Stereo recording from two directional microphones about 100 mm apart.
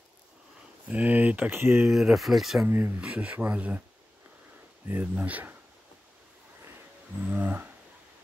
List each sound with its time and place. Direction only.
0.8 s speech: 15° right (ahead or behind)
1.9 s speech: 5° right (ahead or behind)
2.6 s speech: 20° right (ahead or behind)
4.8 s speech: 20° right (ahead or behind)
7.2 s speech: 15° right (ahead or behind)